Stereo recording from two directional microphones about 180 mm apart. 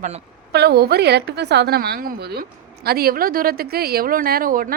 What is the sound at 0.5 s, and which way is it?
A woman's voice, 65° right (ahead or behind).